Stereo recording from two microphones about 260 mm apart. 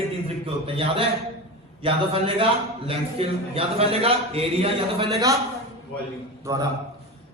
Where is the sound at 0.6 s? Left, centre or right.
Right.